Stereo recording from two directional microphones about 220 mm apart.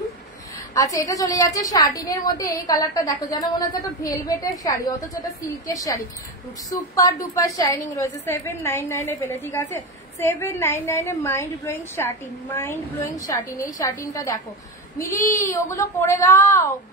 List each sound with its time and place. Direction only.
0.7 s a woman's voice: 15° left (ahead or behind)